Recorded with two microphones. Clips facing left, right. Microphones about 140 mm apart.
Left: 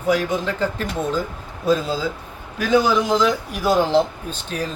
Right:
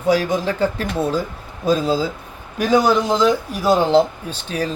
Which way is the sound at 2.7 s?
35° right (ahead or behind).